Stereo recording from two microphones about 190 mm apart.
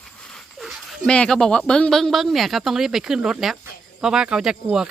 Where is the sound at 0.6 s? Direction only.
Centre (ahead or behind).